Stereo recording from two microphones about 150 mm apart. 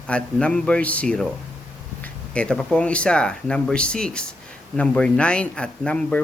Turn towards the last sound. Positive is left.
turn(degrees=5)  # may be behind; listen again after turning